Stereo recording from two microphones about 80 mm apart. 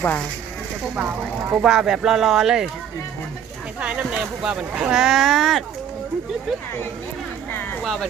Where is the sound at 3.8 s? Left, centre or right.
Centre.